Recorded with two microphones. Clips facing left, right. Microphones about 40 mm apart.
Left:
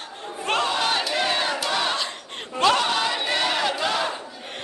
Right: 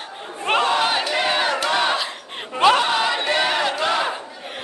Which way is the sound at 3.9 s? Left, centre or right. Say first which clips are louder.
Right 3 dB; centre.